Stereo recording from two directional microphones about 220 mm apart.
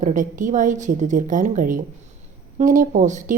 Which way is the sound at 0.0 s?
35° right (ahead or behind).